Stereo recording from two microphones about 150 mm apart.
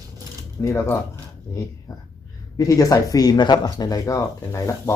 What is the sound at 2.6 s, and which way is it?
Speech, 25° left (ahead or behind).